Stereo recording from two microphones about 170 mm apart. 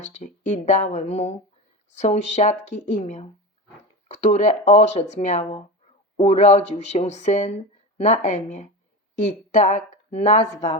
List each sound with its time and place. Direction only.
0.0 s speech: 45° left (ahead or behind)